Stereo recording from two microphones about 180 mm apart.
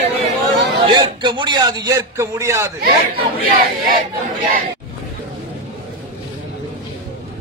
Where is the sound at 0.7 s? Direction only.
25° right (ahead or behind).